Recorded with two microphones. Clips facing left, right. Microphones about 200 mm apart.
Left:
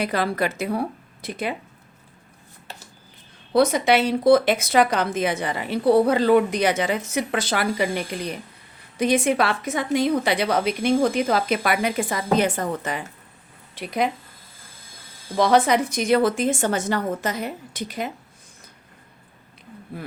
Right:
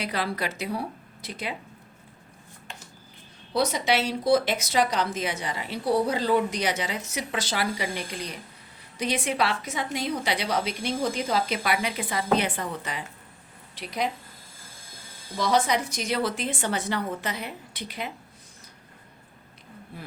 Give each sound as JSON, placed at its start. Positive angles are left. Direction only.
{"t": 0.0, "sound": "a woman's voice", "side_deg": 50}
{"t": 3.5, "sound": "a woman's voice", "side_deg": 55}
{"t": 15.4, "sound": "a woman's voice", "side_deg": 60}